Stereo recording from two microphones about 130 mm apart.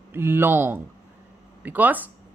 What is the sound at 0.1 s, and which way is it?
A man's voice, 15° right (ahead or behind).